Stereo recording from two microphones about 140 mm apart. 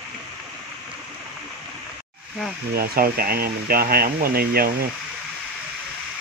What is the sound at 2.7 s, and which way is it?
Speech, 90° right.